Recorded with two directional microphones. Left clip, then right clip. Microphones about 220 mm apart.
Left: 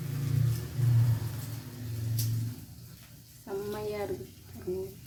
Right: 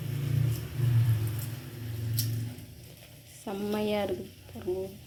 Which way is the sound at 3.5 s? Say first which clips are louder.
Left 1 dB; 30° right (ahead or behind).